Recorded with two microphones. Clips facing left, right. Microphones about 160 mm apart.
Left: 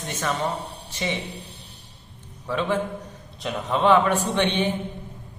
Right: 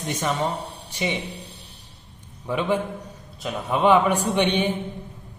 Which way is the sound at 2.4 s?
15° right (ahead or behind).